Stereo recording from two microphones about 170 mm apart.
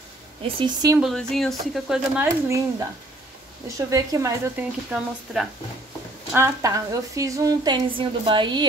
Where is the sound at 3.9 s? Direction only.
20° right (ahead or behind).